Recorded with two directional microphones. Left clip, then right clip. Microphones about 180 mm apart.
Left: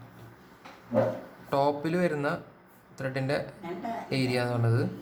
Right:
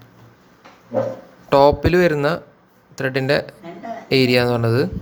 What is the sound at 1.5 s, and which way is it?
Speech, 45° right (ahead or behind).